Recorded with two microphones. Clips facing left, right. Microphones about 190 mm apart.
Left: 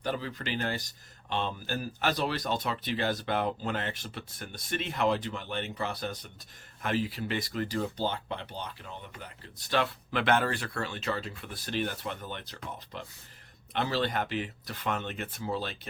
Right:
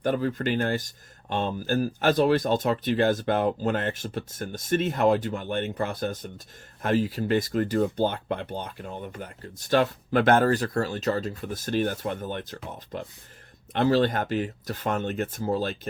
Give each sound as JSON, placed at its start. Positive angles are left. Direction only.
{"t": 0.0, "sound": "speech", "side_deg": -50}